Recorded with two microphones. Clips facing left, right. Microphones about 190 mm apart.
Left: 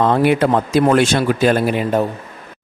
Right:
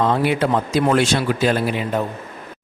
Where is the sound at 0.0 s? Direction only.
55° left (ahead or behind).